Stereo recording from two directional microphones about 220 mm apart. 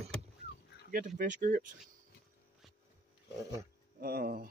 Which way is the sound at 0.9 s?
35° right (ahead or behind).